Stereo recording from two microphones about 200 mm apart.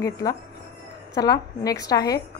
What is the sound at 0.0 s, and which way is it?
A woman's voice, 20° left (ahead or behind).